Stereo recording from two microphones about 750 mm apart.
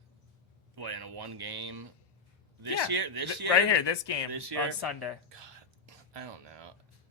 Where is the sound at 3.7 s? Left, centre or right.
Left.